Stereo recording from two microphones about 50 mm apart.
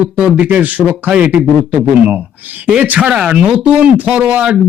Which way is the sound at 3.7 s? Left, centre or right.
Right.